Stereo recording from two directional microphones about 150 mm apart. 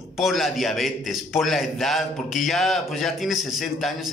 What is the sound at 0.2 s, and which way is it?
A man's voice, centre (ahead or behind).